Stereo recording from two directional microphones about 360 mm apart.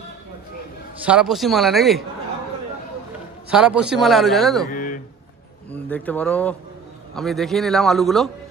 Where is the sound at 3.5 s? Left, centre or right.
Centre.